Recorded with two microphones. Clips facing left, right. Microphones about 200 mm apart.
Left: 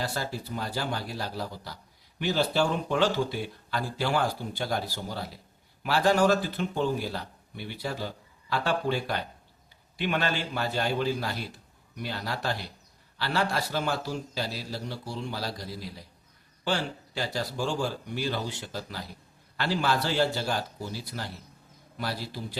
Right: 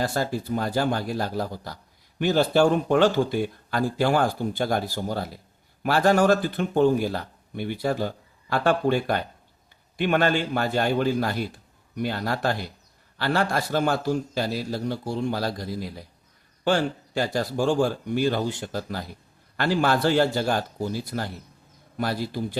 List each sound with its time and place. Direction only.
0.0 s speech: 50° right (ahead or behind)